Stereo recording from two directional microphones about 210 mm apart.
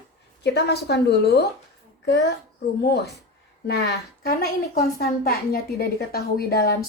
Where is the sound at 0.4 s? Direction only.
50° left (ahead or behind).